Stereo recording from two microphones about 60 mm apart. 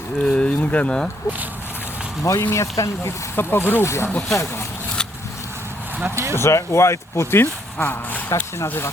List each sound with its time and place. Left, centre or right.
0.3 s speech: centre
2.2 s speech: left
3.3 s speech: left
6.0 s speech: right
6.3 s speech: left